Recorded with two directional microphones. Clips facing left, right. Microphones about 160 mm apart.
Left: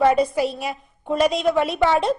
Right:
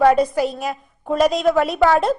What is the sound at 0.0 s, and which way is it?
A woman's voice, 5° left (ahead or behind).